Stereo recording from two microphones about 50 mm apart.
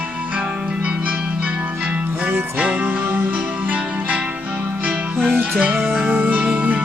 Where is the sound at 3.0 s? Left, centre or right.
Right.